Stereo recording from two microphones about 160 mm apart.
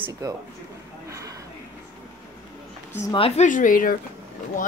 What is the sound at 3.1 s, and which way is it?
Speech, 35° left (ahead or behind).